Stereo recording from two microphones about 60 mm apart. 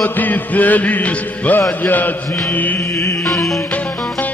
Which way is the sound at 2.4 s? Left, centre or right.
Left.